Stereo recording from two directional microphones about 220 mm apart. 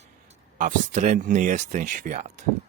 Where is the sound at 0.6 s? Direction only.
35° right (ahead or behind).